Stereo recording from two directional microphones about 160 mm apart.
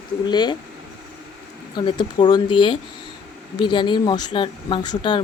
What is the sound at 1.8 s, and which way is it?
Speech, 30° left (ahead or behind).